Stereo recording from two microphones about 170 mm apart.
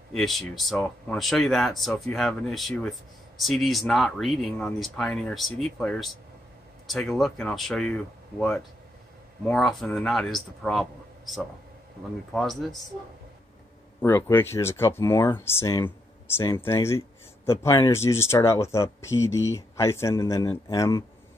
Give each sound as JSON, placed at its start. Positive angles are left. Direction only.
{"t": 0.1, "sound": "speech", "side_deg": 0}
{"t": 14.0, "sound": "speech", "side_deg": 15}